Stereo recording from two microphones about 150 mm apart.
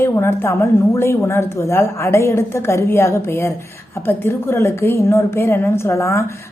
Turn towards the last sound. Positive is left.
turn(degrees=20)  # may be behind; listen again after turning